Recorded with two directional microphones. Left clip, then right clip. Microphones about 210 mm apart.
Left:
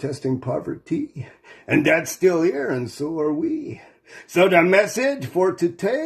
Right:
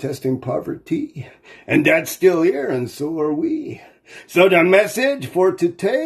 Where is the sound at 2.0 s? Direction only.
Centre (ahead or behind).